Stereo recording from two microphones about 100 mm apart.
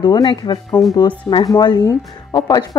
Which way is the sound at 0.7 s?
25° left (ahead or behind).